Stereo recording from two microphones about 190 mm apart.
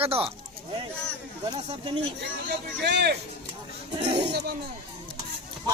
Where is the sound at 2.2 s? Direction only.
60° right (ahead or behind).